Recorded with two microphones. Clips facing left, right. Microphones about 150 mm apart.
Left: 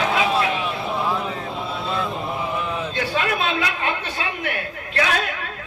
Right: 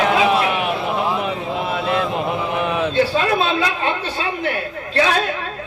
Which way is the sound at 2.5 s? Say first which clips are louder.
Right 6 dB; 70° right (ahead or behind).